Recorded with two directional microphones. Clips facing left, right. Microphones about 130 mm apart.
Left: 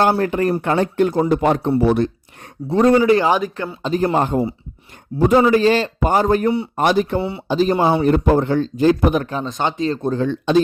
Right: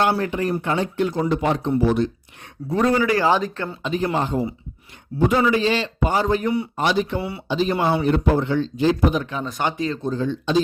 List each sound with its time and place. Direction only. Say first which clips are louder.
0.2 s speech: left 5 dB; 50° left (ahead or behind)
2.6 s speech: left 6 dB; 30° left (ahead or behind); by 3.8 s 15° left (ahead or behind)
3.8 s speech: left 5 dB; 45° left (ahead or behind)
7.2 s speech: left 5 dB; 25° left (ahead or behind)
7.4 s speech: left 4 dB; 40° left (ahead or behind)
9.4 s speech: left 3 dB; 25° left (ahead or behind)
10.0 s speech: left 4 dB; 60° left (ahead or behind)